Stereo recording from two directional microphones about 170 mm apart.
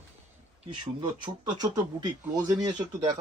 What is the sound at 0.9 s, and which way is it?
Speech, 25° right (ahead or behind).